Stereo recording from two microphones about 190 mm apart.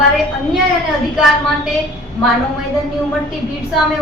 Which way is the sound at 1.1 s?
Centre (ahead or behind).